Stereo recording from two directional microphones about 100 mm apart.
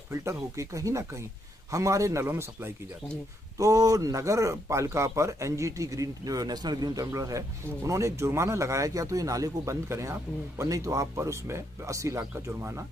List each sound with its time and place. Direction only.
0.1 s a man's voice: 30° right (ahead or behind)